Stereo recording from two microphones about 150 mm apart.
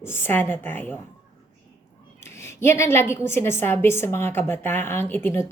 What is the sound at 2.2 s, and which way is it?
A woman's voice, 20° left (ahead or behind).